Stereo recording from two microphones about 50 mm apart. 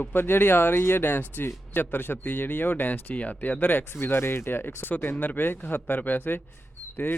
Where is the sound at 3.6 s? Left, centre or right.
Left.